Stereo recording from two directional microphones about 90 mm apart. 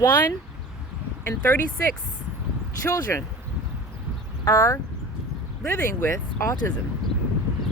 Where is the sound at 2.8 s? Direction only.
35° left (ahead or behind).